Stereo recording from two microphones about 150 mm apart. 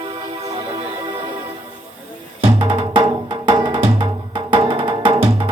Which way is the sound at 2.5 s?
35° right (ahead or behind).